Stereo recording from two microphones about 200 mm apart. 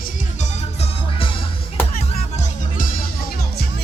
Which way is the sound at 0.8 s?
25° left (ahead or behind).